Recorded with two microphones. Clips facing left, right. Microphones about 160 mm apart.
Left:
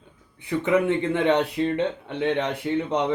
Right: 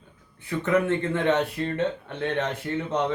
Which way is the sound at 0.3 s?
15° left (ahead or behind).